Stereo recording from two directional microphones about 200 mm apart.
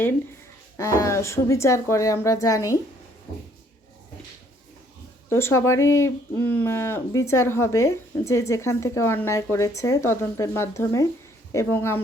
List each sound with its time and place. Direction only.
0.8 s speech: 15° left (ahead or behind)
5.3 s speech: 15° left (ahead or behind)